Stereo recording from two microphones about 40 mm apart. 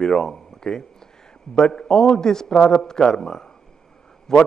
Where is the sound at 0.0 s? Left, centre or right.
Centre.